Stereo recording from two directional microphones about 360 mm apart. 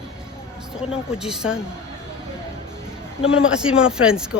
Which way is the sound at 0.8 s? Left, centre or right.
Centre.